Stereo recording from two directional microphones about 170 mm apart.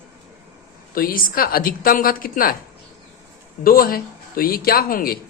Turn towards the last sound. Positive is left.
turn(degrees=60)  # may be behind; listen again after turning